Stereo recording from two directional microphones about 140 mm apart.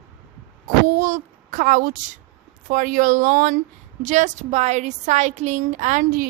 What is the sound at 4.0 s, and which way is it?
A woman's voice, 60° right (ahead or behind).